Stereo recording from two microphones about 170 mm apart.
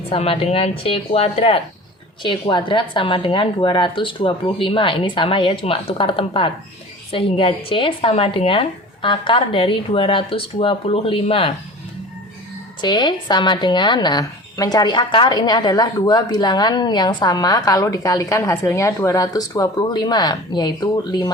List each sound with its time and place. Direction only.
0.1 s a woman's voice: 35° left (ahead or behind)
12.8 s a woman's voice: 25° left (ahead or behind)